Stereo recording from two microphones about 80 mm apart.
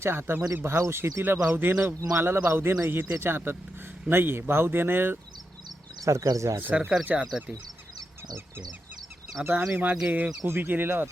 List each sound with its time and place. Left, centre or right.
0.0 s speech: right
6.1 s speech: right
6.6 s speech: right
9.4 s speech: right